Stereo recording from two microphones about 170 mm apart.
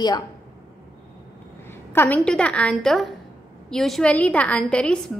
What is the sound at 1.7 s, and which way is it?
A woman's voice, 15° left (ahead or behind).